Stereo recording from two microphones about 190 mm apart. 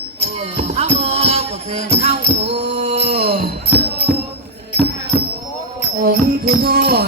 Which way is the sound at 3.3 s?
55° right (ahead or behind).